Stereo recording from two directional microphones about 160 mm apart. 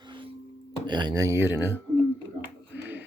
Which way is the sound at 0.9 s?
25° right (ahead or behind).